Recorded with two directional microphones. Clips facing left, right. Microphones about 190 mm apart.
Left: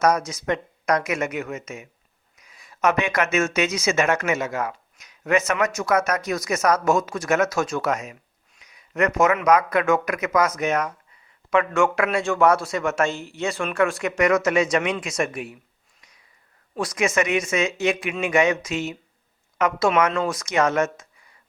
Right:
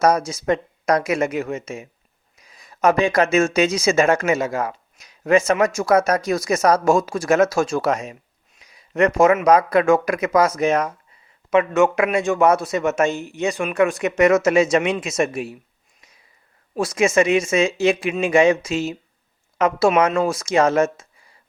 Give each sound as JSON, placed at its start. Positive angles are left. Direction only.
{"t": 0.0, "sound": "speech", "side_deg": -30}
{"t": 16.0, "sound": "a sound", "side_deg": -25}
{"t": 16.7, "sound": "speech", "side_deg": -25}